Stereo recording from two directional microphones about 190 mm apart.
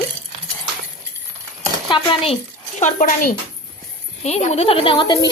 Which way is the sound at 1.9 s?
30° left (ahead or behind).